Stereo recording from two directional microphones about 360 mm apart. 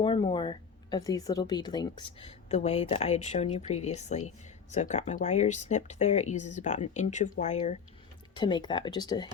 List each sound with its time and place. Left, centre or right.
0.0 s speech: centre